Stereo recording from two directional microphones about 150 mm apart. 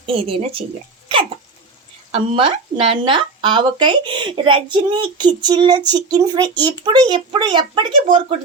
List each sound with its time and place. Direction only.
0.0 s speech: 35° right (ahead or behind)
2.1 s speech: 35° right (ahead or behind)